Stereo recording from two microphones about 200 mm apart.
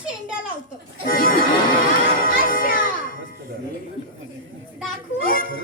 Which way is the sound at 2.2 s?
45° left (ahead or behind).